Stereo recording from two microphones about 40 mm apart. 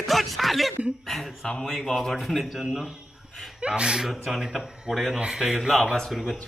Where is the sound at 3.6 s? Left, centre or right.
Right.